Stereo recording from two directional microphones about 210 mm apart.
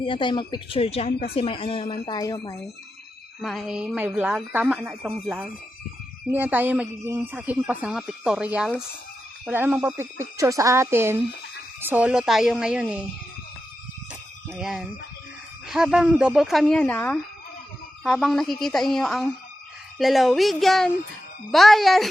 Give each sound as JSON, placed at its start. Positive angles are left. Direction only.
{"t": 0.0, "sound": "speech", "side_deg": 25}
{"t": 3.4, "sound": "a woman's voice", "side_deg": 0}
{"t": 14.4, "sound": "a woman's voice", "side_deg": 0}